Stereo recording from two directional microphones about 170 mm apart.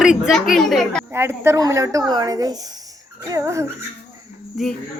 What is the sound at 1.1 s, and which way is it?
A woman's voice, 15° right (ahead or behind).